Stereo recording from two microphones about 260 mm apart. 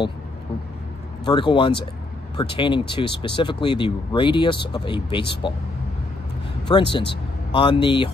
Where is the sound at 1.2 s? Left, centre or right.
Centre.